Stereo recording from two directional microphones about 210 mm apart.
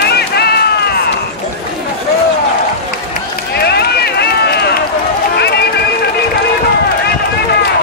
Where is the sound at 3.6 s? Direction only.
50° left (ahead or behind).